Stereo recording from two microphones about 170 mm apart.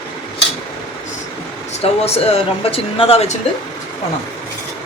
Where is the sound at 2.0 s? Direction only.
35° left (ahead or behind).